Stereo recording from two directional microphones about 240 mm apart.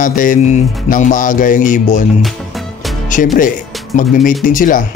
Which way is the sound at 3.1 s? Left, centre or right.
Left.